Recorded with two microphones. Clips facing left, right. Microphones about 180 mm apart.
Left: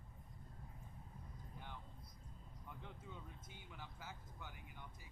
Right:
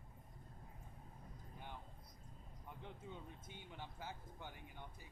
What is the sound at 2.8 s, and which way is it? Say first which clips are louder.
Speech: right 5 dB; 25° right (ahead or behind).